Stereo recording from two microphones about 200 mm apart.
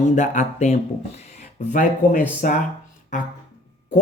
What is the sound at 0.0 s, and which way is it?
Speech, 35° left (ahead or behind).